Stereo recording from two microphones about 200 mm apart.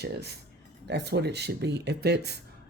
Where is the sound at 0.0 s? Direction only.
55° right (ahead or behind).